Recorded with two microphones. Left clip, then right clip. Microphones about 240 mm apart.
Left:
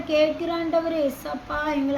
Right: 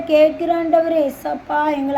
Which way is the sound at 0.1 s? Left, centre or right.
Centre.